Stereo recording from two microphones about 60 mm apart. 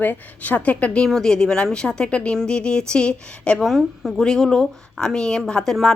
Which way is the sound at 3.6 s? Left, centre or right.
Centre.